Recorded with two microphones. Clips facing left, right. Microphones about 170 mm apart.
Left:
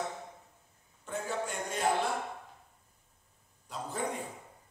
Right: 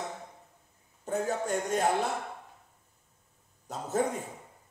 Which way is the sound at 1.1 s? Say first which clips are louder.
Right 7 dB; 40° right (ahead or behind).